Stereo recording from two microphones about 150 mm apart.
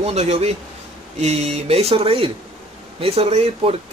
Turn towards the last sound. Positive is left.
turn(degrees=-40)  # may be behind; listen again after turning